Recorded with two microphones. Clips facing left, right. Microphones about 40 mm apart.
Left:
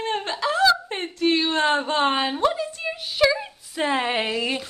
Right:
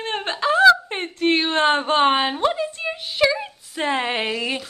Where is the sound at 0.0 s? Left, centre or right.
Right.